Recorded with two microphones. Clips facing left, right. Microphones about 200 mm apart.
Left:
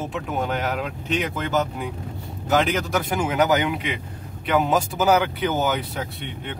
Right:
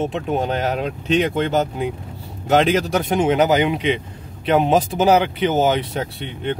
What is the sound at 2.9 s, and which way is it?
Speech, 25° right (ahead or behind).